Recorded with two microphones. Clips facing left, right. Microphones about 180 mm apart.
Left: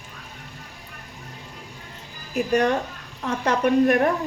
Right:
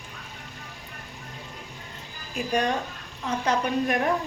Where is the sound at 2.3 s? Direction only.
60° left (ahead or behind).